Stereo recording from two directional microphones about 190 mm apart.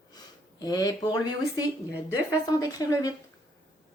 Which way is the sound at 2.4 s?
20° left (ahead or behind).